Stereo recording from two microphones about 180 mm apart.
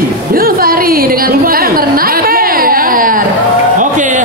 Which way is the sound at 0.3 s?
55° right (ahead or behind).